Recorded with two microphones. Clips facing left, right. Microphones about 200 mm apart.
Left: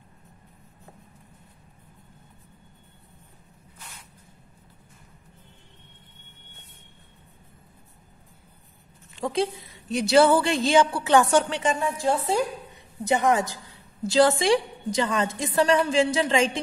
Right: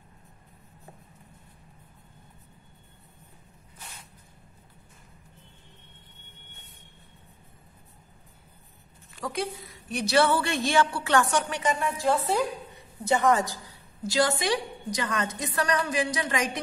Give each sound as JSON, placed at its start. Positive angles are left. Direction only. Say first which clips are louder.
{"t": 9.1, "sound": "a woman's voice", "louder": "left 6 dB", "side_deg": 25}
{"t": 14.5, "sound": "a woman's voice", "louder": "left 6 dB", "side_deg": 25}